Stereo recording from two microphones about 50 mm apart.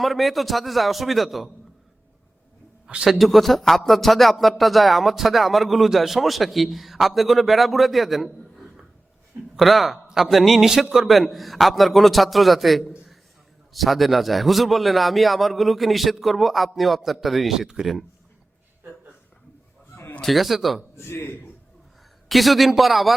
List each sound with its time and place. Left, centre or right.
0.0 s speech: centre
2.8 s speech: centre
9.6 s speech: centre
20.2 s speech: centre
20.9 s a man's voice: left
22.3 s speech: centre